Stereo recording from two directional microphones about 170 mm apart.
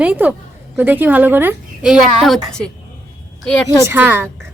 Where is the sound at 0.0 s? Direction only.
10° right (ahead or behind).